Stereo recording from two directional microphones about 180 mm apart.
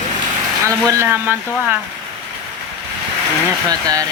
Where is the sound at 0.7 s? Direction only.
15° right (ahead or behind).